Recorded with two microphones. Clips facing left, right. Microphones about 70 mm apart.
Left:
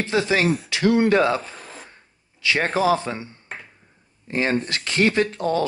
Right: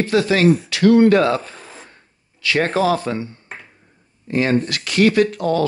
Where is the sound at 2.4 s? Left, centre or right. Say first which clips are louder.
Right 2 dB; left.